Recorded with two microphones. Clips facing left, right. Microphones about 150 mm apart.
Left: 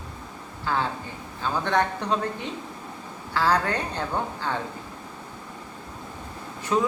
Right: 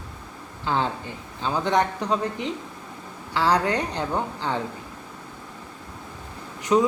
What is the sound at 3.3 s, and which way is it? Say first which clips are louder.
Speech: right 2 dB; 15° right (ahead or behind).